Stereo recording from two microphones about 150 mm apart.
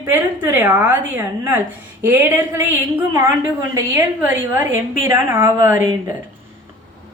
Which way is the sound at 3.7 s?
15° right (ahead or behind).